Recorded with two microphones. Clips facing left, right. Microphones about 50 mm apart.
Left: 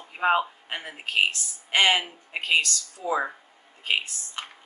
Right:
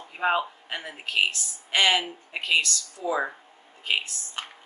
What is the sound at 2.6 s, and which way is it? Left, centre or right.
Speech, left.